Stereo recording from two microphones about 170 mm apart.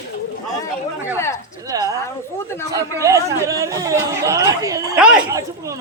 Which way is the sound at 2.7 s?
20° right (ahead or behind).